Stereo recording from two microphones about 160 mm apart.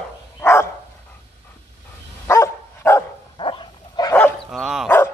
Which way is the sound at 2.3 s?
15° left (ahead or behind).